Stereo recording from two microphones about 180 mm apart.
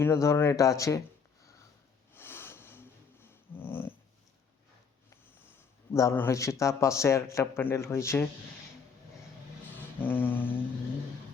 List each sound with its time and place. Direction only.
0.0 s speech: 15° left (ahead or behind)
2.1 s a sound: 10° left (ahead or behind)
5.9 s speech: 15° left (ahead or behind)
10.0 s speech: 10° left (ahead or behind)